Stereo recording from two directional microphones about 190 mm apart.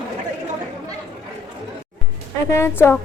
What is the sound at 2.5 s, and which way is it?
Speech, 10° left (ahead or behind).